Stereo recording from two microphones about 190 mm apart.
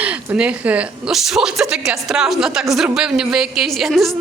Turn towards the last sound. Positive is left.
turn(degrees=0)  # may be behind; listen again after turning